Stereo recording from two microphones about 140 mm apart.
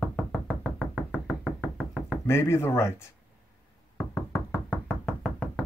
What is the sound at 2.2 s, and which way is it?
Speech, 20° left (ahead or behind).